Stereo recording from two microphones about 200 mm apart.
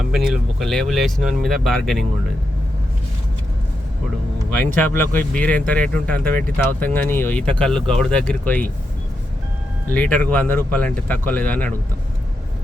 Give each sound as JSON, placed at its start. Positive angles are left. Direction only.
{"t": 0.0, "sound": "speech", "side_deg": 0}
{"t": 4.5, "sound": "speech", "side_deg": 10}
{"t": 9.9, "sound": "speech", "side_deg": 10}